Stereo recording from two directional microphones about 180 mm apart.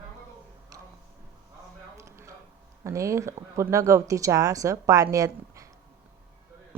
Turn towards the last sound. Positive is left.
turn(degrees=-15)  # may be behind; listen again after turning